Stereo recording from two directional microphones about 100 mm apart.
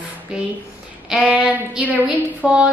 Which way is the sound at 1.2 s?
15° right (ahead or behind).